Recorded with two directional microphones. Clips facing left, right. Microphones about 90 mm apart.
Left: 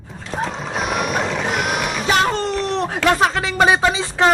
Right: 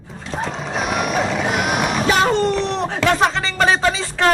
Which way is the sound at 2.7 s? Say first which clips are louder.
Left 1 dB; centre (ahead or behind).